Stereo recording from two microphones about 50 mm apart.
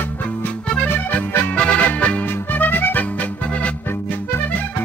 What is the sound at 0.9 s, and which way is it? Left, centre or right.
Music, left.